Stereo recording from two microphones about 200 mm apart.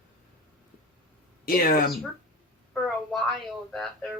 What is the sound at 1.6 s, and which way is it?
Speech, 45° left (ahead or behind).